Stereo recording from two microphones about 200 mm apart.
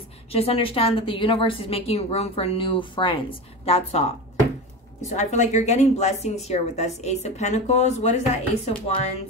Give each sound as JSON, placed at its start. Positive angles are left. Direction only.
{"t": 0.3, "sound": "a woman's voice", "side_deg": 30}
{"t": 5.1, "sound": "a woman's voice", "side_deg": 35}